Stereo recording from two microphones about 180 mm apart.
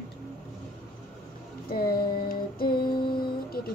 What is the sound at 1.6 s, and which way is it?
Child singing, 55° left (ahead or behind).